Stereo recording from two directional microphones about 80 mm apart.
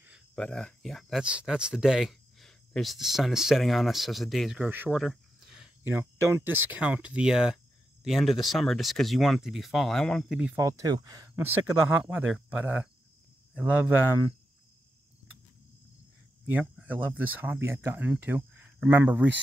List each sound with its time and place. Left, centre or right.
0.4 s speech: centre
1.2 s speech: centre
4.6 s speech: right
4.9 s cricket: centre
5.9 s speech: right
6.8 s speech: centre
10.5 s speech: right
11.3 s speech: right
16.8 s speech: right